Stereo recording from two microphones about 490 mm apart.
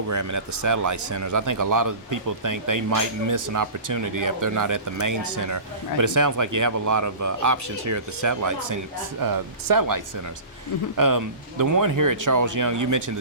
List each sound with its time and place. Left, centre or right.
0.1 s speech: right